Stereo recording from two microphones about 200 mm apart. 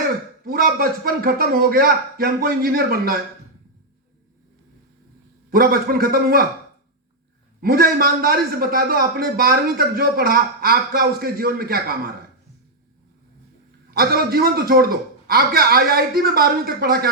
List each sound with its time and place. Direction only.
0.4 s a man's voice: 50° right (ahead or behind)
5.5 s a man's voice: 50° right (ahead or behind)
7.6 s a man's voice: 50° right (ahead or behind)
13.9 s a man's voice: 50° right (ahead or behind)